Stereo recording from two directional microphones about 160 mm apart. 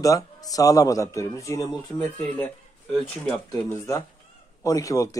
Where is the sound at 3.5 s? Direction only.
20° left (ahead or behind).